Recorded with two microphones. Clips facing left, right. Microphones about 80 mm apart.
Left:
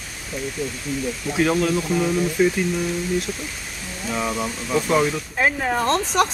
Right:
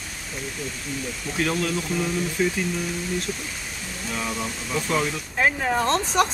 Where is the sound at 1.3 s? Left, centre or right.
Centre.